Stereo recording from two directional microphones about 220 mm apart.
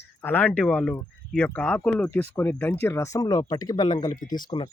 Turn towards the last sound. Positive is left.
turn(degrees=20)  # may be behind; listen again after turning